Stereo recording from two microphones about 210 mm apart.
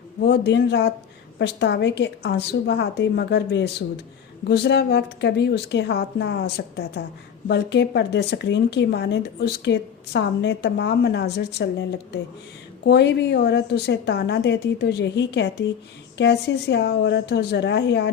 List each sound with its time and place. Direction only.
0.3 s speech: 55° left (ahead or behind)
12.8 s speech: 55° left (ahead or behind)